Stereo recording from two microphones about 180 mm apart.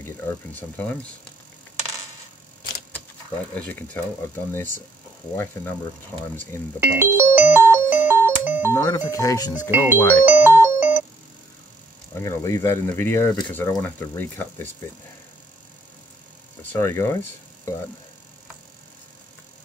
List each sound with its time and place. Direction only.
0.0 s speech: 10° left (ahead or behind)
3.5 s speech: 10° left (ahead or behind)
5.4 s speech: 15° left (ahead or behind)
6.8 s music: 10° right (ahead or behind)
8.7 s speech: 20° left (ahead or behind)
10.2 s ringtone: 10° right (ahead or behind)
12.1 s speech: 15° left (ahead or behind)
16.7 s speech: 15° left (ahead or behind)